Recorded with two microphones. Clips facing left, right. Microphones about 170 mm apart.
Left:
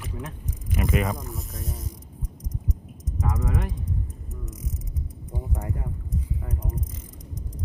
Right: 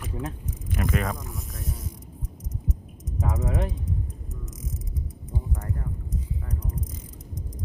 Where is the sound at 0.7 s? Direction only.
5° left (ahead or behind).